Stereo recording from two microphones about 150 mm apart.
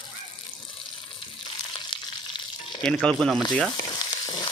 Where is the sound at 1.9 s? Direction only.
35° left (ahead or behind).